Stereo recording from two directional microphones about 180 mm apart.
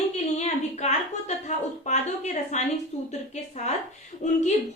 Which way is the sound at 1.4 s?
40° left (ahead or behind).